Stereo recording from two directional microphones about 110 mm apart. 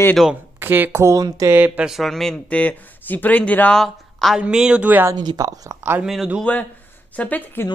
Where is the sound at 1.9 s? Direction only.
Centre (ahead or behind).